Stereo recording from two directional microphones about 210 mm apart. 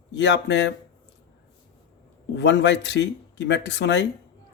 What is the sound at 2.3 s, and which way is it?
Speech, 55° left (ahead or behind).